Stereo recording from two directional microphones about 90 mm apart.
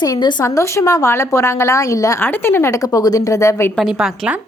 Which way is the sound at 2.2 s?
25° left (ahead or behind).